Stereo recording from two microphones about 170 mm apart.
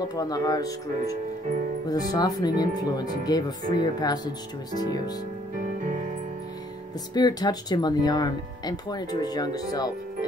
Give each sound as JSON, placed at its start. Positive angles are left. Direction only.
{"t": 0.1, "sound": "speech", "side_deg": 20}
{"t": 7.2, "sound": "speech", "side_deg": 25}